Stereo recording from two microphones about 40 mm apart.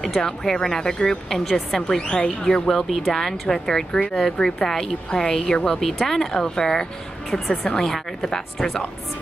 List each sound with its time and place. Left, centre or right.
0.0 s a woman's voice: centre
2.0 s speech: left
2.7 s speech: centre
7.2 s a woman's voice: centre